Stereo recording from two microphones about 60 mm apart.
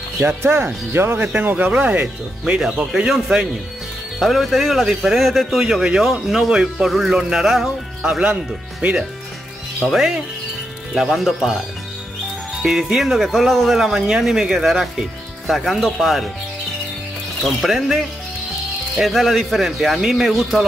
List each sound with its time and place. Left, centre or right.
0.4 s speech: right
1.2 s speech: right
2.6 s speech: centre
4.2 s speech: centre
9.9 s speech: centre
11.0 s speech: centre
12.6 s speech: centre
17.4 s speech: centre